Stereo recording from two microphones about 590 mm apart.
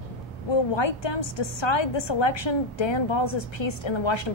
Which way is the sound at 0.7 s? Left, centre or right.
Left.